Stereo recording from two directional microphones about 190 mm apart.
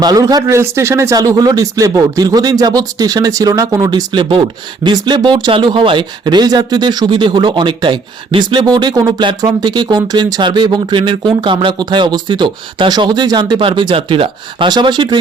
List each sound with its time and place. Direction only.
0.0 s speech: 20° right (ahead or behind)